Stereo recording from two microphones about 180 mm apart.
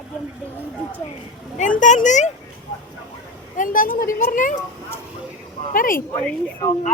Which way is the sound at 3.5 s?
50° left (ahead or behind).